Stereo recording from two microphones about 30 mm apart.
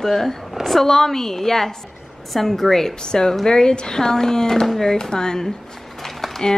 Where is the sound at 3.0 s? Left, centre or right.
Left.